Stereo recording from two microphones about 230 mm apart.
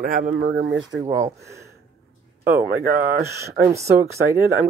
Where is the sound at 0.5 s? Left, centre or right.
Right.